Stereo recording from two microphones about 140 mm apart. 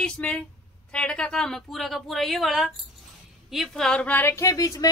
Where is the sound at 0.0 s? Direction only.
5° left (ahead or behind).